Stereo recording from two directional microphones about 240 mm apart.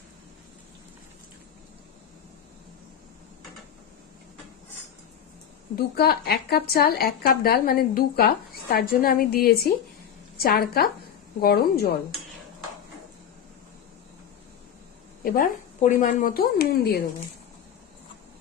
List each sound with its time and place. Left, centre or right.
5.7 s speech: left
15.2 s speech: left